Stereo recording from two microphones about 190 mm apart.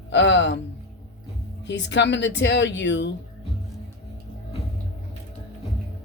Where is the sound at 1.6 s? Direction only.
70° left (ahead or behind).